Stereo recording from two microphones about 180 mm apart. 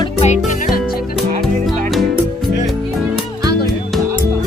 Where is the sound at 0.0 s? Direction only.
40° left (ahead or behind).